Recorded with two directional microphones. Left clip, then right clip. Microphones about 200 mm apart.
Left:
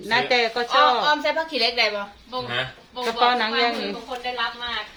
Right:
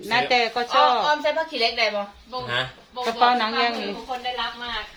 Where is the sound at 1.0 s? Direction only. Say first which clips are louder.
Left 1 dB; 35° left (ahead or behind).